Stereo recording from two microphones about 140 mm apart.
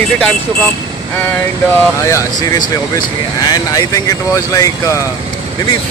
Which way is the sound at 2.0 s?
25° left (ahead or behind).